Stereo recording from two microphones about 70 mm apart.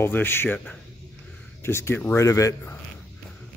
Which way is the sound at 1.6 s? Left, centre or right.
Left.